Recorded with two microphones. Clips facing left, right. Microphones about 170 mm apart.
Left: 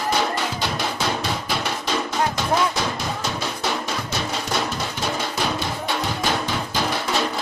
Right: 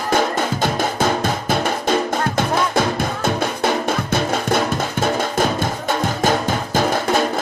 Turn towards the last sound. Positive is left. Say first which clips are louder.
# right 6 dB
turn(degrees=-50)  # may be behind; listen again after turning